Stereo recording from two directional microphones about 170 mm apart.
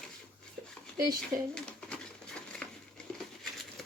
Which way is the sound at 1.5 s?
5° left (ahead or behind).